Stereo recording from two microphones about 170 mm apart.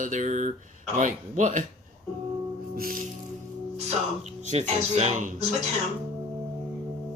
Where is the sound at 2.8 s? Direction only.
60° right (ahead or behind).